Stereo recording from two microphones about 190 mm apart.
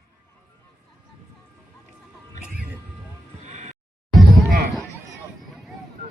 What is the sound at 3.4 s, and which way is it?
Music, 40° right (ahead or behind).